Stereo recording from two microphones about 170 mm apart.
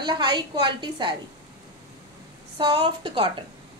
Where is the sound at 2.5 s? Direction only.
30° right (ahead or behind).